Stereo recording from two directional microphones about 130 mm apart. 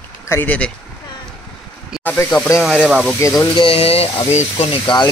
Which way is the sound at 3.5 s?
45° left (ahead or behind).